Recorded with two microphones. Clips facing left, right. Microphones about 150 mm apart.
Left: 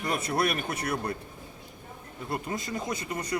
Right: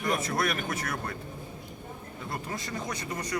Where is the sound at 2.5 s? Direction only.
25° left (ahead or behind).